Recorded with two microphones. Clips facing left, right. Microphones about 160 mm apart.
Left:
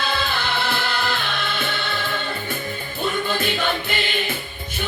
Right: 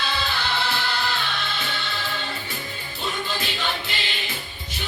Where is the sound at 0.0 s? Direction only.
50° left (ahead or behind).